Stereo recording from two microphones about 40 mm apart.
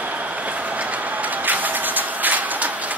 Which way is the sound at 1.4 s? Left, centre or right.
Right.